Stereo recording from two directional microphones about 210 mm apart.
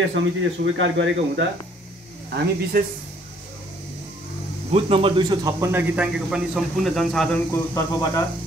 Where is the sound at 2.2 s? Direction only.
50° right (ahead or behind).